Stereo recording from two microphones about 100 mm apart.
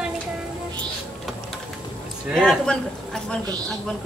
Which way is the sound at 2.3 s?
5° left (ahead or behind).